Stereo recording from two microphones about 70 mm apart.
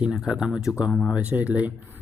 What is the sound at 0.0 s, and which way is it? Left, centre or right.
Speech, centre.